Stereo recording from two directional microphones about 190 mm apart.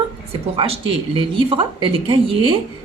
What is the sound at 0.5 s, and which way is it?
A woman's voice, 30° right (ahead or behind).